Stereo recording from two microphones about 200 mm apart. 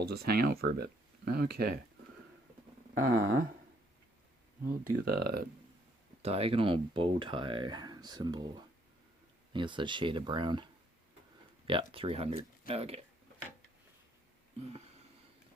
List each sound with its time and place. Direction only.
0.0 s speech: 50° right (ahead or behind)
3.0 s speech: 45° right (ahead or behind)
4.6 s speech: 45° right (ahead or behind)
6.2 s speech: 30° right (ahead or behind)